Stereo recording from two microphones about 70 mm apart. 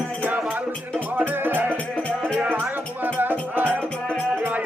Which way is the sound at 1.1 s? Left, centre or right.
Right.